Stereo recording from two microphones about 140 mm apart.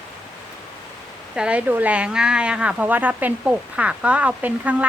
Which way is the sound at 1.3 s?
10° right (ahead or behind).